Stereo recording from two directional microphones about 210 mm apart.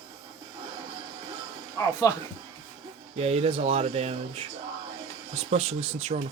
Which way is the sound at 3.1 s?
30° right (ahead or behind).